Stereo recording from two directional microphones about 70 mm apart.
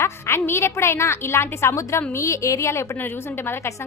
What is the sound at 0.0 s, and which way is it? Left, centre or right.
A woman's voice, left.